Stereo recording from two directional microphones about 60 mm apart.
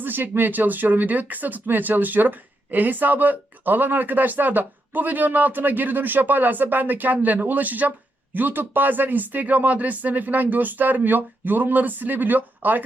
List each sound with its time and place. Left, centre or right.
0.0 s speech: right